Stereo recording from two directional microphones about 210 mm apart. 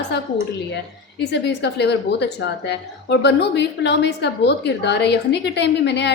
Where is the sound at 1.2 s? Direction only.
55° left (ahead or behind).